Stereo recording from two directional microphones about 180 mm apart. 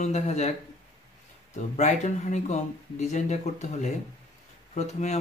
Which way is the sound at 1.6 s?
40° left (ahead or behind).